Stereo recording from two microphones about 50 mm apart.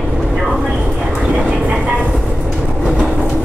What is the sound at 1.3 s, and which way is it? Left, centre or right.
Vehicle, right.